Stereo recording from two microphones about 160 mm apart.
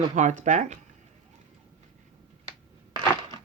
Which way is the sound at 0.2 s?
50° right (ahead or behind).